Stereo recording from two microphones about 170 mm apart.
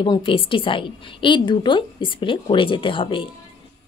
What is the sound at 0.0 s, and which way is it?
A woman's voice, 30° left (ahead or behind).